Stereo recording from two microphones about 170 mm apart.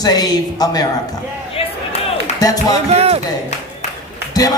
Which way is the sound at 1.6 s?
35° left (ahead or behind).